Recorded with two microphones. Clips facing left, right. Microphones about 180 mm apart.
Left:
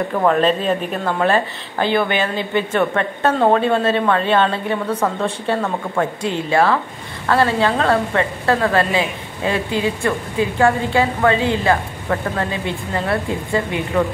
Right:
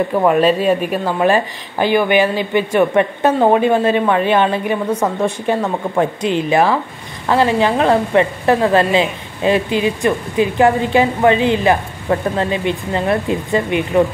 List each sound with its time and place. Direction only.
0.2 s a woman's voice: 10° right (ahead or behind)